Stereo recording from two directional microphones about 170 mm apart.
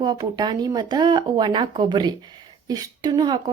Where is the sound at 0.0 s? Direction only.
25° right (ahead or behind).